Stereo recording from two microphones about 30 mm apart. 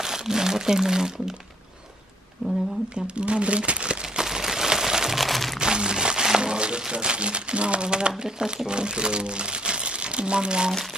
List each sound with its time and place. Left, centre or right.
0.0 s speech: centre
2.9 s speech: right
4.0 s a sound: centre
5.1 s crumpling: centre
5.6 s speech: right